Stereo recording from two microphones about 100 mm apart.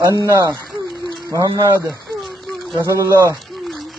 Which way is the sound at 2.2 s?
Centre (ahead or behind).